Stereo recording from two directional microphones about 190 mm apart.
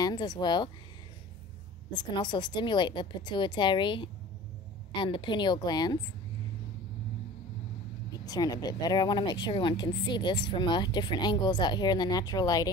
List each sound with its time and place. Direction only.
0.0 s speech: 20° left (ahead or behind)
1.9 s speech: 25° left (ahead or behind)
8.1 s speech: 20° left (ahead or behind)